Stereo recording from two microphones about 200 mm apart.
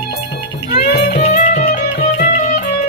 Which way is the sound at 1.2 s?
35° left (ahead or behind).